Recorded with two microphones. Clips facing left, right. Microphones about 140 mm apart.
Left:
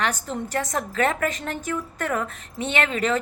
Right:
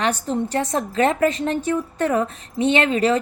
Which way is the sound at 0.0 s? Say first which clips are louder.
Right 5 dB; 30° right (ahead or behind).